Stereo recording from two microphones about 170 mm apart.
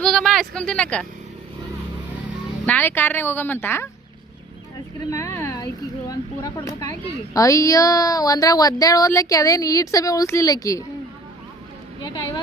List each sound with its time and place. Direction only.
0.0 s speech: 5° left (ahead or behind)
2.6 s speech: 10° left (ahead or behind)
5.1 s boat: 15° left (ahead or behind)
6.1 s a sound: 20° left (ahead or behind)
7.3 s speech: 20° left (ahead or behind)